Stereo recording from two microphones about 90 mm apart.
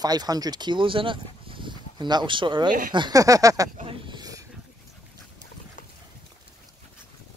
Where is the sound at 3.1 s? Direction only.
40° right (ahead or behind).